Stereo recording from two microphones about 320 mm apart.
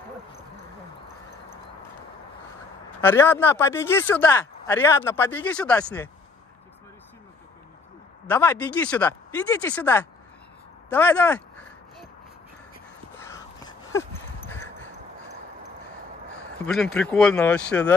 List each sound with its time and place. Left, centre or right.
3.0 s speech: centre
8.3 s speech: centre
13.1 s a sound: centre
16.6 s speech: centre